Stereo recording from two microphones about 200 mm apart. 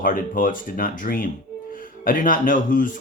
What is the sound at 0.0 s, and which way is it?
Speech, 45° left (ahead or behind).